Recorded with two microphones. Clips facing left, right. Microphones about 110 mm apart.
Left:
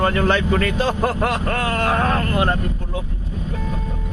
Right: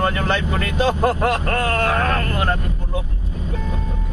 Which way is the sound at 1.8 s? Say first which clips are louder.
Left 1 dB; 20° left (ahead or behind).